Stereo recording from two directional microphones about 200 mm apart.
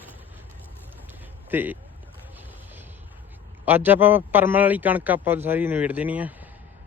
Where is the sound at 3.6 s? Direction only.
10° right (ahead or behind).